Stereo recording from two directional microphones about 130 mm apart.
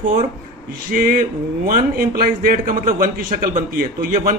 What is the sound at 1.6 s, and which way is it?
A man's voice, 90° right.